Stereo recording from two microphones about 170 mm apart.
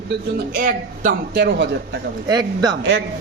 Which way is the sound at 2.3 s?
25° right (ahead or behind).